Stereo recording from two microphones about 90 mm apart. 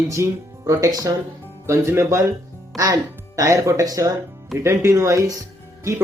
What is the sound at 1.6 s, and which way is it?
Speech, 30° right (ahead or behind).